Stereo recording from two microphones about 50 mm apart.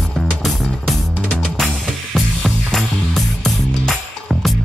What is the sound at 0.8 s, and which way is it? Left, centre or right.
Music, centre.